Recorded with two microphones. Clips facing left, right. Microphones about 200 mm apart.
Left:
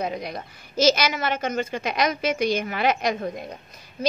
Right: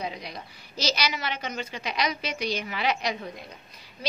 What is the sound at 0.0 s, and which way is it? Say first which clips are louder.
A woman's voice: left 6 dB; 50° left (ahead or behind).